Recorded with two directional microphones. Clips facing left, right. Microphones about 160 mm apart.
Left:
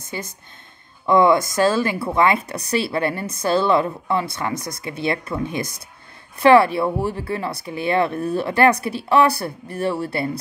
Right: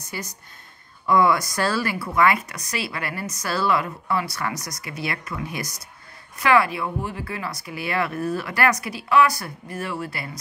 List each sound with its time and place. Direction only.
0.1 s speech: 25° left (ahead or behind)